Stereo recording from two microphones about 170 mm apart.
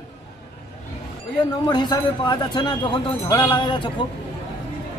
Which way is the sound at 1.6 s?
25° left (ahead or behind).